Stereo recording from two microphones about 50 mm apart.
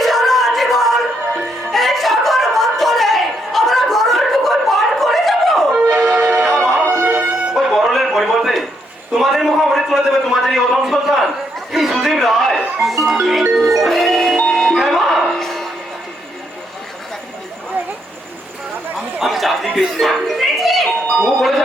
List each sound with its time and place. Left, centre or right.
0.0 s a sound: centre
6.1 s music: right
6.9 s music: right
7.8 s a sound: centre
12.8 s music: centre
14.8 s music: centre
15.3 s bow-wow: centre
18.9 s chatter: centre
19.7 s a sound: centre